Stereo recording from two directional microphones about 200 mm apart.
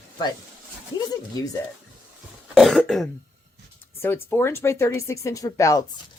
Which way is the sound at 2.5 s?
Centre (ahead or behind).